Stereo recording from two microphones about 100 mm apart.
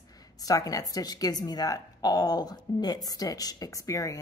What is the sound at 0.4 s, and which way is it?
A woman's voice, 35° left (ahead or behind).